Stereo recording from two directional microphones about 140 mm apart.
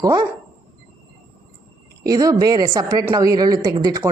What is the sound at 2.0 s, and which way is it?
A woman's voice, 25° right (ahead or behind).